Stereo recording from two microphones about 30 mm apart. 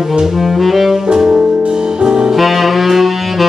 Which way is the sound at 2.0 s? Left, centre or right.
Right.